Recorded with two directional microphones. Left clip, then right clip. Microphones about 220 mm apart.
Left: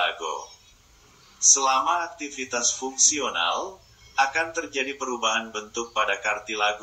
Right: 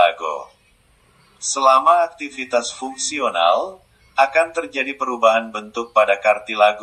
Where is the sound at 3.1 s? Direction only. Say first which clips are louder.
Right 8 dB; 5° right (ahead or behind).